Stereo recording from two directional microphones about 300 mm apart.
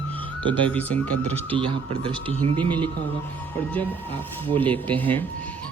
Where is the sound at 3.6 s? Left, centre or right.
Centre.